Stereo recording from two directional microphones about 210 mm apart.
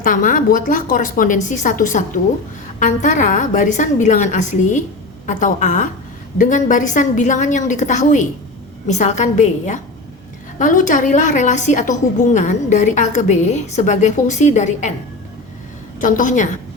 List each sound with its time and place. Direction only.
0.0 s a woman's voice: 40° left (ahead or behind)
16.0 s a woman's voice: 40° left (ahead or behind)